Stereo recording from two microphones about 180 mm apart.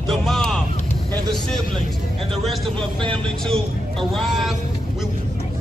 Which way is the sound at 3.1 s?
5° left (ahead or behind).